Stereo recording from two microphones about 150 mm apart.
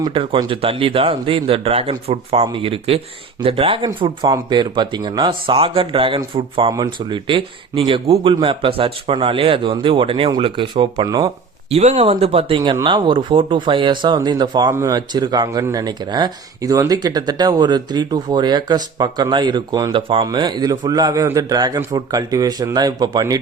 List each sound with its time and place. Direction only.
0.0 s speech: 35° right (ahead or behind)
6.7 s speech: 25° right (ahead or behind)
11.7 s speech: 45° right (ahead or behind); by 23.4 s 25° right (ahead or behind)